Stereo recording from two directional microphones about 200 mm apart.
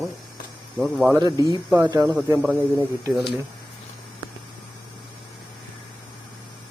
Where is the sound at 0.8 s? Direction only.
10° right (ahead or behind).